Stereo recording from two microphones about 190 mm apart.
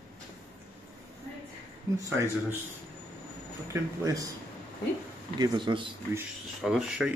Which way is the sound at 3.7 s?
15° right (ahead or behind).